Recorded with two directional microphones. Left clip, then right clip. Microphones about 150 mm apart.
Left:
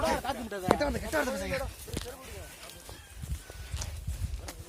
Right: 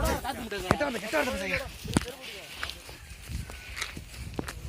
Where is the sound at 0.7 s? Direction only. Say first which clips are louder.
Even; 50° right (ahead or behind).